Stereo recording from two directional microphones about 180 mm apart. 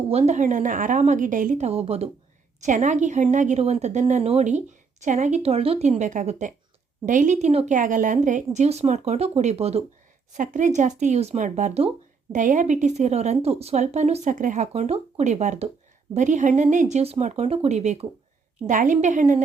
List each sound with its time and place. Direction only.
0.1 s a woman's voice: 35° right (ahead or behind)